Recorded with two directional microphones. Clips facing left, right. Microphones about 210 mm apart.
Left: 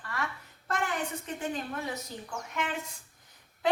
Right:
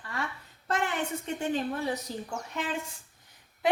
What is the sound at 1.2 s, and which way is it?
A woman's voice, 30° right (ahead or behind).